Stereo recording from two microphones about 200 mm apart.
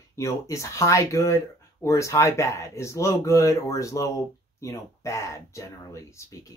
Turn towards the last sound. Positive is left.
turn(degrees=15)  # may be behind; listen again after turning